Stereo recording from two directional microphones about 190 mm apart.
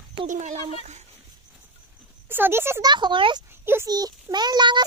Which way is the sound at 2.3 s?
10° right (ahead or behind).